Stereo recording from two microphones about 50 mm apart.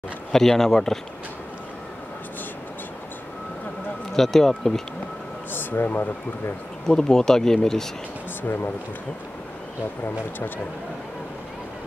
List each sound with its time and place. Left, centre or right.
0.3 s speech: centre
4.1 s speech: centre
5.5 s speech: left
6.9 s speech: centre
8.4 s speech: left